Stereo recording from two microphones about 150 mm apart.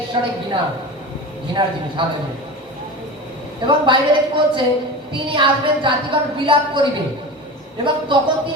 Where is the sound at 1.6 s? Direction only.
30° right (ahead or behind).